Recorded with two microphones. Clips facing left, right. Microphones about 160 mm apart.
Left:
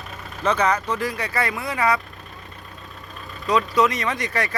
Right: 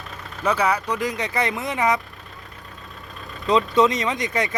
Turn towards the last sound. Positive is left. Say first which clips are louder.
# right 1 dB
turn(degrees=-20)  # may be behind; listen again after turning